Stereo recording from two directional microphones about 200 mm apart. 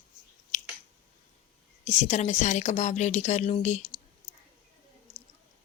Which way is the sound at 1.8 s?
35° left (ahead or behind).